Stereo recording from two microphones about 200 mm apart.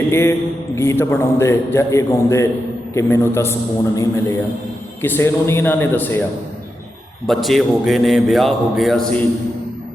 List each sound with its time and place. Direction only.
0.1 s a man's voice: 10° left (ahead or behind)
7.3 s mantra: centre (ahead or behind)